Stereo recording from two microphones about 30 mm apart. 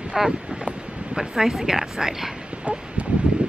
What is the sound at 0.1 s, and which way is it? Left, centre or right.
Speech, right.